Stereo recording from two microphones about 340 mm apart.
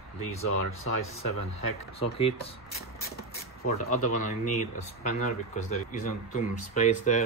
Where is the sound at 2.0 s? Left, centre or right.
Centre.